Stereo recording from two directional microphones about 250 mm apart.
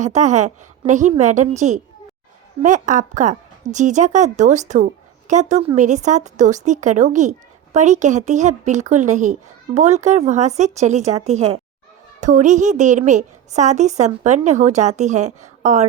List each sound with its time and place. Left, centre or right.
0.0 s a woman's voice: right